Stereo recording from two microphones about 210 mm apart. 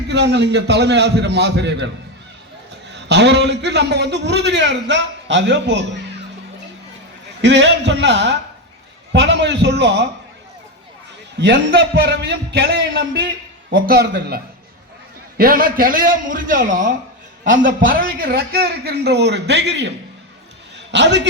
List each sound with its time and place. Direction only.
0.1 s a man's voice: 55° right (ahead or behind)
2.9 s a man's voice: 55° right (ahead or behind)
7.4 s a man's voice: 55° right (ahead or behind)
11.3 s a man's voice: 55° right (ahead or behind)
20.9 s a man's voice: 55° right (ahead or behind)